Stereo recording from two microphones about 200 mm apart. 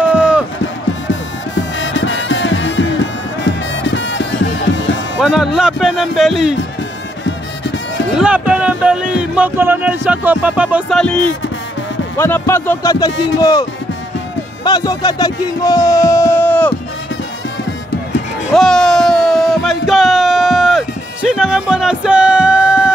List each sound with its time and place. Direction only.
0.1 s crowd: 5° right (ahead or behind)
1.0 s music: 70° left (ahead or behind)
5.2 s speech: centre (ahead or behind)
8.1 s speech: 5° right (ahead or behind); by 13.7 s 20° left (ahead or behind)
14.6 s music: 20° left (ahead or behind)
18.5 s a sound: centre (ahead or behind)
21.4 s speech: 5° right (ahead or behind)